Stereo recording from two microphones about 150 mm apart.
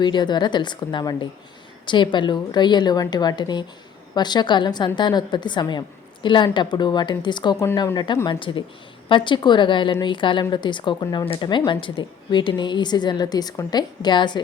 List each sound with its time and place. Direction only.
0.0 s a woman's voice: 30° left (ahead or behind)
7.6 s speech: 20° left (ahead or behind)
7.9 s a woman's voice: 30° left (ahead or behind)